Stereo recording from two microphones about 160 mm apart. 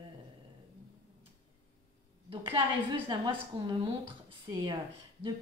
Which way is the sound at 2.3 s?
30° right (ahead or behind).